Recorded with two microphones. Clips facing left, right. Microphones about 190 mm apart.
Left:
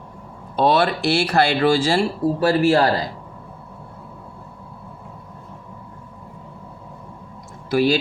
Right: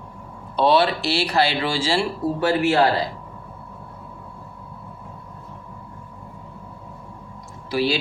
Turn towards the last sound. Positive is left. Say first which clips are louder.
# left 4 dB
turn(degrees=50)  # may be behind; listen again after turning